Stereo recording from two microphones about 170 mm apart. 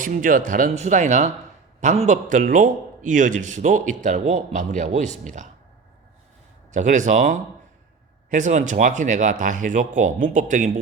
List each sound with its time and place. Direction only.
0.0 s a man's voice: 50° right (ahead or behind)
6.7 s a man's voice: 45° right (ahead or behind)